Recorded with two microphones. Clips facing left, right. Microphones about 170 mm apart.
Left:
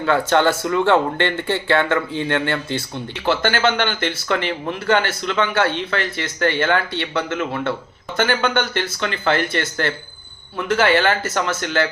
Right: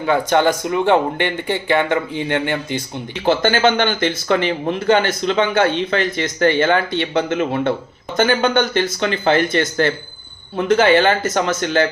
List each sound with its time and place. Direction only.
0.0 s speech: 15° right (ahead or behind)